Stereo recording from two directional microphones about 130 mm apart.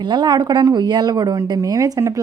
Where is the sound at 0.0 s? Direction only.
35° right (ahead or behind).